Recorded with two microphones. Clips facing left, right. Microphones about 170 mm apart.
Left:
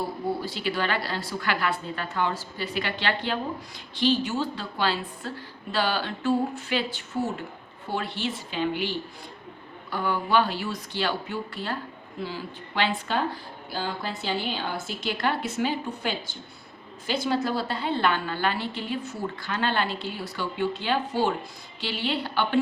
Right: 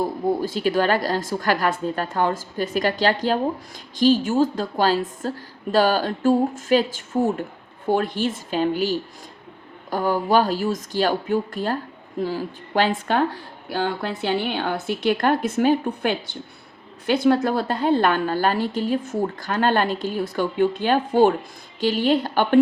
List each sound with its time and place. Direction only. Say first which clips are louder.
0.0 s a woman's voice: right 7 dB; 45° right (ahead or behind)